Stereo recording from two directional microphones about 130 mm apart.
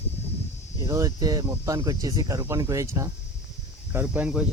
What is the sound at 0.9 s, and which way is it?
Speech, 25° right (ahead or behind).